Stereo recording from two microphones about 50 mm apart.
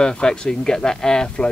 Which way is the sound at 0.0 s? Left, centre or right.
Centre.